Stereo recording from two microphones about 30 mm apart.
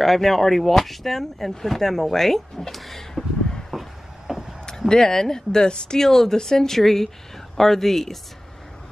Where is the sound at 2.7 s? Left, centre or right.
Centre.